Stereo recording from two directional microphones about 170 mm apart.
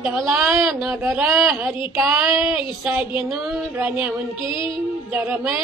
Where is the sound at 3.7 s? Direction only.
10° right (ahead or behind).